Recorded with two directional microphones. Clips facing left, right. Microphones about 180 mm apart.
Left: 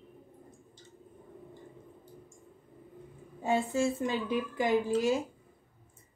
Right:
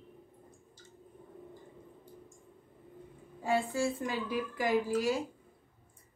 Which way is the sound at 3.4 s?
20° left (ahead or behind).